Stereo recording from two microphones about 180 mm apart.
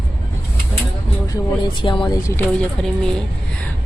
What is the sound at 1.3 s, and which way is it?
Speech, 25° left (ahead or behind).